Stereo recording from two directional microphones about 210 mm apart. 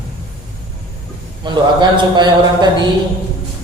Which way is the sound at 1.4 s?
20° right (ahead or behind).